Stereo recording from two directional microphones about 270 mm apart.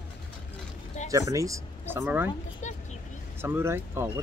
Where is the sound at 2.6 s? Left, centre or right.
Left.